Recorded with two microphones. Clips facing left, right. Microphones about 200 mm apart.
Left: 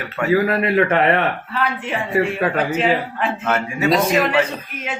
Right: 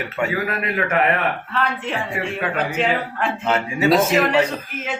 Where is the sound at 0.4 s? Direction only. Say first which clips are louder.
Left 6 dB; 30° left (ahead or behind).